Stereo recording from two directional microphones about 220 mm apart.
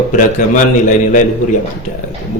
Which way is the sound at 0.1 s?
35° left (ahead or behind).